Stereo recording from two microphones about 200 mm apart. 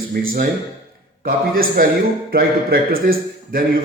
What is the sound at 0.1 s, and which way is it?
A man's voice, 50° right (ahead or behind).